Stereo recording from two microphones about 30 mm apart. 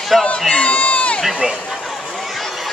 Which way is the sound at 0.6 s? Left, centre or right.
Left.